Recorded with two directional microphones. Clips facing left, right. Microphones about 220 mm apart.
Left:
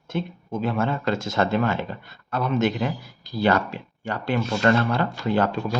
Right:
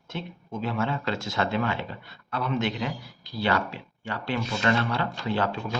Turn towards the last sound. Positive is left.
turn(degrees=45)  # may be behind; listen again after turning